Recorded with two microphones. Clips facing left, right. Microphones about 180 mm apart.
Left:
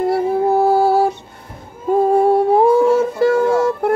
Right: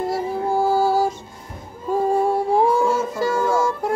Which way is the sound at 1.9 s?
60° left (ahead or behind).